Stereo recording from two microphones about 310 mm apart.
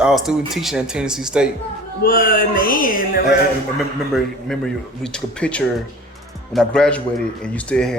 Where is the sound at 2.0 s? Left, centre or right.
Left.